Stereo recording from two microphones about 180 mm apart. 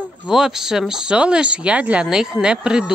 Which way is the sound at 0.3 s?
5° right (ahead or behind).